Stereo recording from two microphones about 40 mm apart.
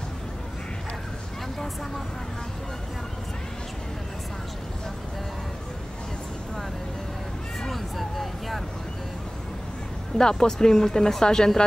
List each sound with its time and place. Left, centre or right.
7.6 s vehicle: centre
10.1 s speech: centre